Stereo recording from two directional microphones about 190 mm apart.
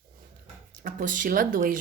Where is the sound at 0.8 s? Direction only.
45° right (ahead or behind).